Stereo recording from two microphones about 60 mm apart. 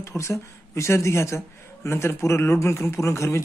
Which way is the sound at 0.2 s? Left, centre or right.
Left.